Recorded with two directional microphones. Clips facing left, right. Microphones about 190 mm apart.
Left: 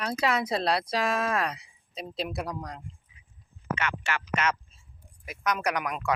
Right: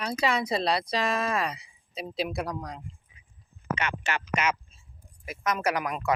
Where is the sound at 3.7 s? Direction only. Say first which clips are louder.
Even; 20° right (ahead or behind).